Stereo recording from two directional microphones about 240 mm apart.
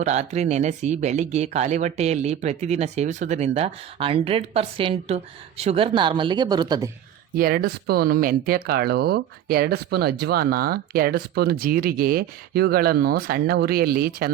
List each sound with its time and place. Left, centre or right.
0.0 s speech: right
7.3 s speech: right